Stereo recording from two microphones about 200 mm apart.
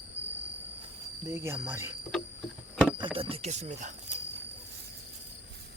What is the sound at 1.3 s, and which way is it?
Speech, 10° right (ahead or behind).